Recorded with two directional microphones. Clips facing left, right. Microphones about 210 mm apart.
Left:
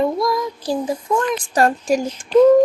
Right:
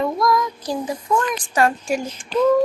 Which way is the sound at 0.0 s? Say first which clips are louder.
Left 1 dB; 30° left (ahead or behind).